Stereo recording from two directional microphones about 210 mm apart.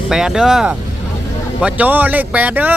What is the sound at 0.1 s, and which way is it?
Speech, 5° right (ahead or behind).